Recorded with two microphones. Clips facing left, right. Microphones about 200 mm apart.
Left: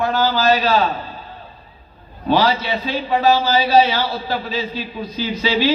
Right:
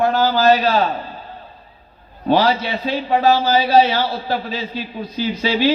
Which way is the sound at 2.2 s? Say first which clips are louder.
Right 1 dB; 55° right (ahead or behind).